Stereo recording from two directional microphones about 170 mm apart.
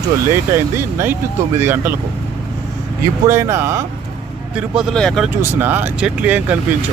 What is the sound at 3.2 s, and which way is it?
Speech, 15° right (ahead or behind).